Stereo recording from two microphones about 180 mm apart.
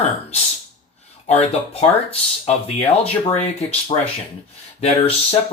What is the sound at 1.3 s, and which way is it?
Speech, 35° left (ahead or behind).